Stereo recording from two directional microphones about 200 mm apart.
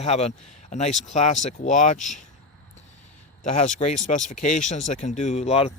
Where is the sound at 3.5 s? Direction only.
35° left (ahead or behind).